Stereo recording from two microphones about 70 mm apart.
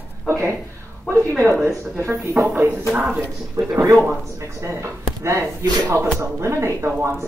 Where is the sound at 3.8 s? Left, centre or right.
Right.